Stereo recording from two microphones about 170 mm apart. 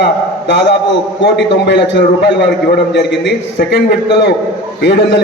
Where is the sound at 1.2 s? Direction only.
90° left.